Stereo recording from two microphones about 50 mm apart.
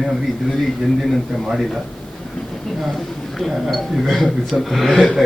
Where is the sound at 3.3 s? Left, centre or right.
Centre.